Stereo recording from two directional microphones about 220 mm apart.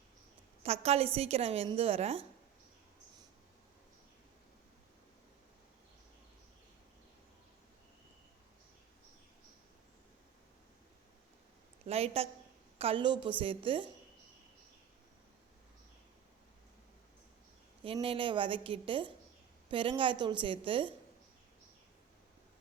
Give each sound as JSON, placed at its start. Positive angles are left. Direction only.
{"t": 0.6, "sound": "a woman's voice", "side_deg": -30}
{"t": 11.9, "sound": "a woman's voice", "side_deg": -30}
{"t": 17.8, "sound": "a woman's voice", "side_deg": -25}